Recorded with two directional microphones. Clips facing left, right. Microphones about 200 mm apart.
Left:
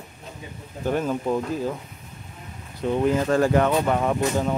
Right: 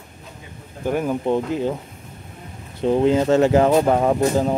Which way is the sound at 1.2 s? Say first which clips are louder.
Right 4 dB; 25° right (ahead or behind).